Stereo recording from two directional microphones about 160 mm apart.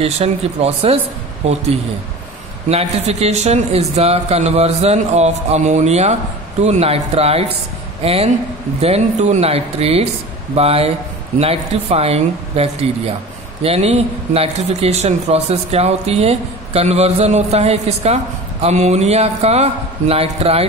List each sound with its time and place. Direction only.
0.0 s a man's voice: 40° right (ahead or behind)